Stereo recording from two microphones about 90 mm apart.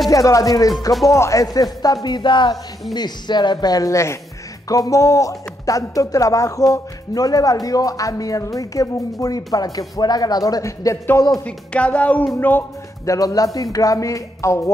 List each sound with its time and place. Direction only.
0.1 s speech: 40° left (ahead or behind)
2.0 s a woman's voice: 55° left (ahead or behind); by 11.0 s 40° left (ahead or behind)
11.4 s music: 15° left (ahead or behind)
12.4 s speech: 20° left (ahead or behind)
13.0 s speech: 40° left (ahead or behind)